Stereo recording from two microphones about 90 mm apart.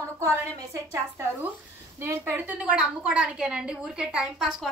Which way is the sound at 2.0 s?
30° right (ahead or behind).